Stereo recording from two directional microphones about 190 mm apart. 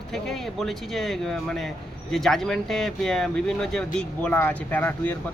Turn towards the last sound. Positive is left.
turn(degrees=10)  # may be behind; listen again after turning